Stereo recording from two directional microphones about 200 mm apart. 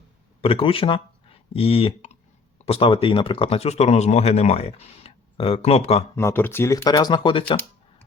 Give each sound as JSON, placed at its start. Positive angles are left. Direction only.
{"t": 0.4, "sound": "speech", "side_deg": 25}
{"t": 6.1, "sound": "speech", "side_deg": 10}